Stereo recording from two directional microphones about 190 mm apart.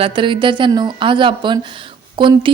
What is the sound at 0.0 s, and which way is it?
Speech, 25° right (ahead or behind).